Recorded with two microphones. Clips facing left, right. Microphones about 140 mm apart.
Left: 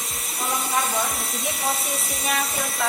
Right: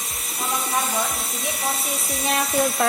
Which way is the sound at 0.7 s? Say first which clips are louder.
Left 1 dB; centre (ahead or behind).